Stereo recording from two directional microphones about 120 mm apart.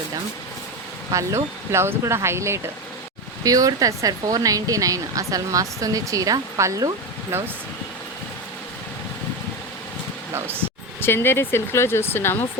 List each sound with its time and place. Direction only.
1.1 s speech: 25° right (ahead or behind)
10.3 s speech: 20° right (ahead or behind)
11.0 s speech: 20° left (ahead or behind)